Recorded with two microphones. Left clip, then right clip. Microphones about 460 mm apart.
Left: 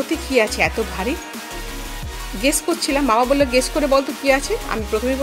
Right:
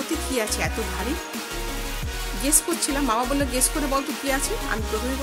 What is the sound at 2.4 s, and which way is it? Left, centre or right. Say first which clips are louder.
Speech: left 6 dB; right.